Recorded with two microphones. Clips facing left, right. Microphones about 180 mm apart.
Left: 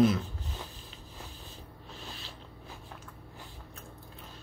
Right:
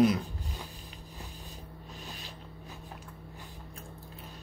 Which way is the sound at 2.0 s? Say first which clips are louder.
Even; 15° right (ahead or behind).